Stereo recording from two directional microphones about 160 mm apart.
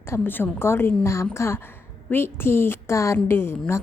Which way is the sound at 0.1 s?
15° left (ahead or behind).